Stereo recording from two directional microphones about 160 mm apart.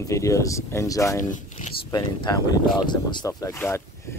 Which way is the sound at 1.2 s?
50° left (ahead or behind).